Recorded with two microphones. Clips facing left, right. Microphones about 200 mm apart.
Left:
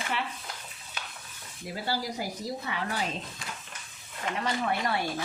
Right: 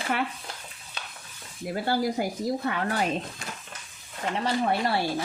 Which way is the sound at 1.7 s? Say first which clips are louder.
Right 6 dB; 55° right (ahead or behind).